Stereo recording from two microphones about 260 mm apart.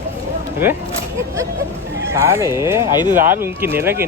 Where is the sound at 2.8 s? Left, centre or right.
Centre.